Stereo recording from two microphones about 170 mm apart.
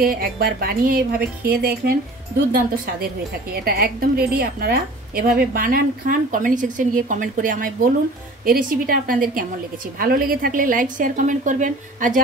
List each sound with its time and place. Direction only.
0.0 s a woman's voice: 60° right (ahead or behind)
3.5 s a woman's voice: 65° right (ahead or behind)